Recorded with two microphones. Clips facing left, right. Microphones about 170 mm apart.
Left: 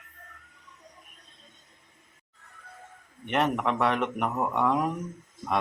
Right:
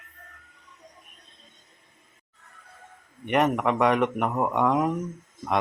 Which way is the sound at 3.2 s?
5° right (ahead or behind).